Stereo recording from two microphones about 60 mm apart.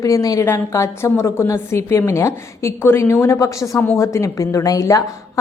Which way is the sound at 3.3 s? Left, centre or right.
Left.